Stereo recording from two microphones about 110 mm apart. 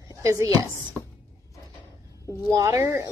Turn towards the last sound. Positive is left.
turn(degrees=-30)  # may be behind; listen again after turning